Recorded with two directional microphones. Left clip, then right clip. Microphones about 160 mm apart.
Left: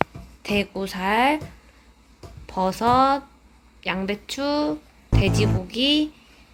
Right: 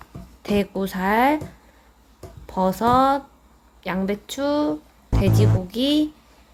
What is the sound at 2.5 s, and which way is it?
Speech, 15° right (ahead or behind).